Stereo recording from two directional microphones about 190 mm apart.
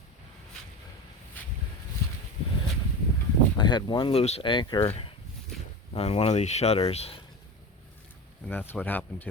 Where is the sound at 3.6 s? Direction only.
25° left (ahead or behind).